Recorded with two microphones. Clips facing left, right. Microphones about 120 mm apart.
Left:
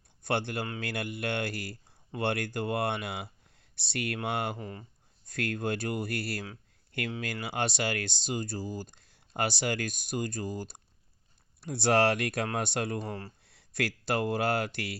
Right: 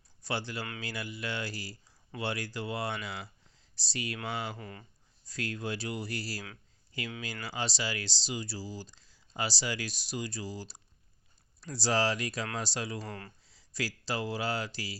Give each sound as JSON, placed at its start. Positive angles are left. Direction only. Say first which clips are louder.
{"t": 0.2, "sound": "speech", "louder": "left 5 dB", "side_deg": 55}
{"t": 4.5, "sound": "speech", "louder": "left 4 dB", "side_deg": 30}
{"t": 5.2, "sound": "speech", "louder": "left 4 dB", "side_deg": 55}
{"t": 13.1, "sound": "speech", "louder": "left 4 dB", "side_deg": 30}
{"t": 13.4, "sound": "speech", "louder": "left 4 dB", "side_deg": 60}